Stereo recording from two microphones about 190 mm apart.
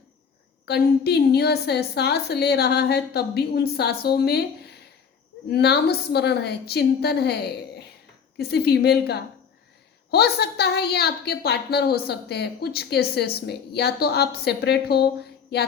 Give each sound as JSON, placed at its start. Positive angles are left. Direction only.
{"t": 0.6, "sound": "a woman's voice", "side_deg": 60}